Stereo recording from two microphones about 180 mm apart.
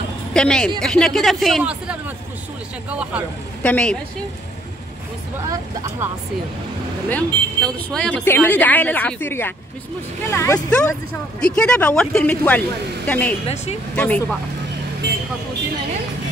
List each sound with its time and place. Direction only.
0.3 s a woman's voice: 5° left (ahead or behind)
3.6 s a woman's voice: 5° left (ahead or behind)
5.5 s speech: 20° right (ahead or behind)
7.1 s a woman's voice: 5° left (ahead or behind)